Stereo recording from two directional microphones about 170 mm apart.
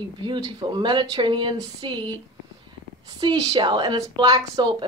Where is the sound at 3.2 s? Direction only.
25° right (ahead or behind).